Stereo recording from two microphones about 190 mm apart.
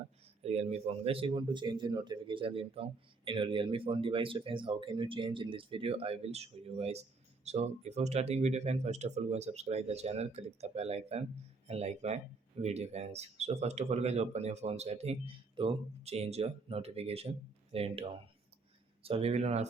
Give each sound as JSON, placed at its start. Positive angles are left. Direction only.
{"t": 0.4, "sound": "speech", "side_deg": -35}